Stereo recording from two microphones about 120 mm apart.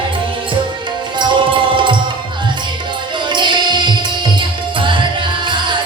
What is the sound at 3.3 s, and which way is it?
Music, 40° right (ahead or behind).